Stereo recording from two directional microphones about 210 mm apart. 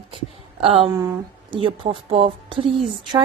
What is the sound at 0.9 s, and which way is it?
A woman's voice, 15° right (ahead or behind).